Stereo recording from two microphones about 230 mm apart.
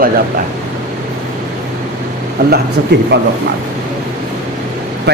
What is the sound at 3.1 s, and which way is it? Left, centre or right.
Speech, right.